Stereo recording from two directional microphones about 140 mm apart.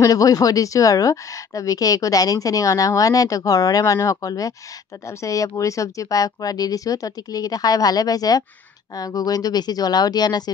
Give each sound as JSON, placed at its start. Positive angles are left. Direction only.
{"t": 0.0, "sound": "a woman's voice", "side_deg": 25}